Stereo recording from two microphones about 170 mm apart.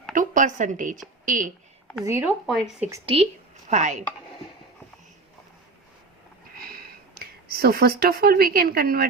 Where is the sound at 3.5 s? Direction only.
45° right (ahead or behind).